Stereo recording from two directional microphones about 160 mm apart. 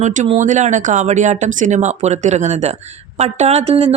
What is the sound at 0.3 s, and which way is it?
Speech, 50° right (ahead or behind).